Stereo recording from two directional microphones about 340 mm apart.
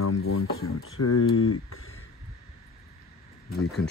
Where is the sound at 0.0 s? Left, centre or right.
Left.